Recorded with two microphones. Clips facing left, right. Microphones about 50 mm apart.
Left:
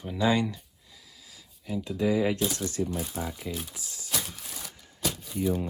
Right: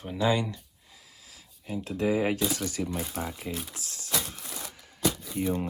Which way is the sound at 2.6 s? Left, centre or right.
Right.